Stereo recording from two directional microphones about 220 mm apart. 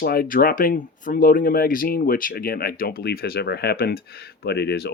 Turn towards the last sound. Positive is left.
turn(degrees=50)  # may be behind; listen again after turning